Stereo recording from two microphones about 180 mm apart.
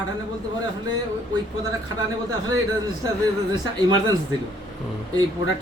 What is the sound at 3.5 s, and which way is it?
Speech, 25° right (ahead or behind).